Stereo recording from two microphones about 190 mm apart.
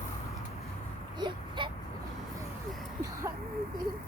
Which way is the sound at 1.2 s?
25° right (ahead or behind).